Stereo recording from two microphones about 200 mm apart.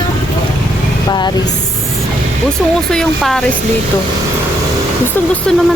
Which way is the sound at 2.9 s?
Centre (ahead or behind).